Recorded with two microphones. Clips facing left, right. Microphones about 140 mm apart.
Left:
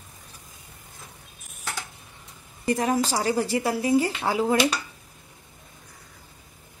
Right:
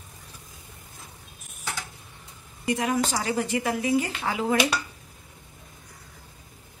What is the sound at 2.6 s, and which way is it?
Speech, 35° left (ahead or behind).